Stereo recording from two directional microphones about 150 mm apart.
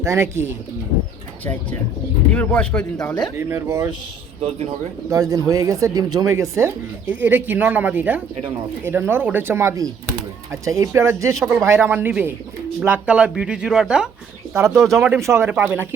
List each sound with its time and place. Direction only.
0.0 s speech: 20° right (ahead or behind)
2.3 s speech: 10° left (ahead or behind)
3.3 s speech: 15° right (ahead or behind)
4.4 s speech: 45° right (ahead or behind)
5.0 s speech: 20° right (ahead or behind); by 14.1 s 5° right (ahead or behind)
14.5 s speech: 20° right (ahead or behind)